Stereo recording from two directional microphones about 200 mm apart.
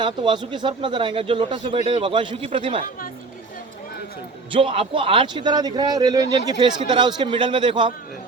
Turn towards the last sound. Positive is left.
turn(degrees=-25)  # may be behind; listen again after turning